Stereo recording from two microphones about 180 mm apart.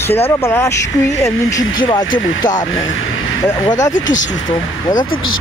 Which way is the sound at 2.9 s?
90° left.